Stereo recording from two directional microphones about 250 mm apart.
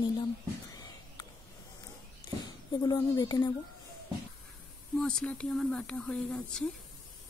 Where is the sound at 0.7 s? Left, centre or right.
Centre.